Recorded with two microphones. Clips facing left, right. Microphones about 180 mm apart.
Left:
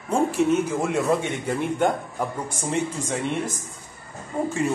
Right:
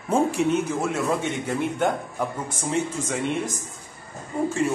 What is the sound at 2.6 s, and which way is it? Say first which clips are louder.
Speech: even; 10° left (ahead or behind).